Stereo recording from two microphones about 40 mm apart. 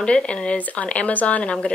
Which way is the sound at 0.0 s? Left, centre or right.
Left.